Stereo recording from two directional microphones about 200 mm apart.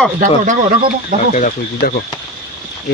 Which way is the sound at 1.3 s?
40° left (ahead or behind).